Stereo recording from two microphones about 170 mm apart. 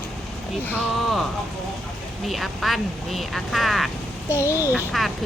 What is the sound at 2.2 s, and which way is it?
Speech, centre (ahead or behind).